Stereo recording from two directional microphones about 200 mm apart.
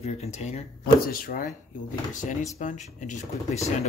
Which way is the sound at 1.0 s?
45° left (ahead or behind).